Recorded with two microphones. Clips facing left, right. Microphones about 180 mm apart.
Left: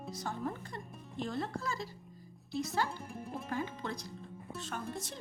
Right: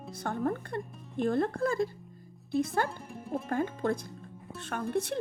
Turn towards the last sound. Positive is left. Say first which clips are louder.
# right 9 dB
turn(degrees=-60)  # may be behind; listen again after turning